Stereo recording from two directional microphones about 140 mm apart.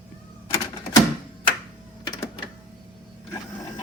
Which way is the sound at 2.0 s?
30° left (ahead or behind).